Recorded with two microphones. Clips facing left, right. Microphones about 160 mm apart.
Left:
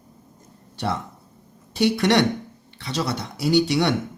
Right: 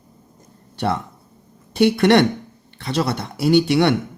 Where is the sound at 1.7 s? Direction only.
55° right (ahead or behind).